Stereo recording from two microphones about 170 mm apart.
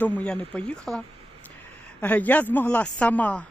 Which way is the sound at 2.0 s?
10° left (ahead or behind).